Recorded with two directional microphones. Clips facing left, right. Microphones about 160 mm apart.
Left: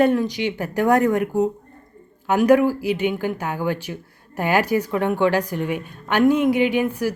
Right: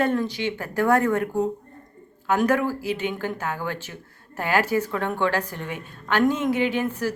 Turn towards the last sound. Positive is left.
turn(degrees=10)  # may be behind; listen again after turning